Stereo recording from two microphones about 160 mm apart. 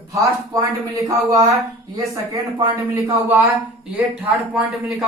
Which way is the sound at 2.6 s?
30° right (ahead or behind).